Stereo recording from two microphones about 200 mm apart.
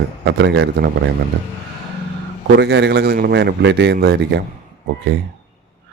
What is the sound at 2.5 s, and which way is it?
Speech, 60° right (ahead or behind).